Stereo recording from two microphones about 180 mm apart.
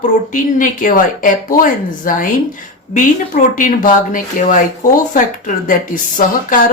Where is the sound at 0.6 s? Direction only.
45° left (ahead or behind).